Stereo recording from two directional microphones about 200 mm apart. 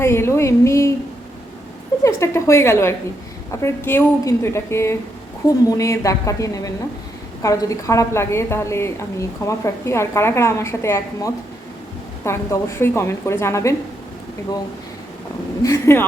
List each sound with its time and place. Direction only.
0.0 s a woman's voice: 15° left (ahead or behind)
2.0 s a woman's voice: 15° left (ahead or behind)
15.6 s a woman's voice: 15° left (ahead or behind)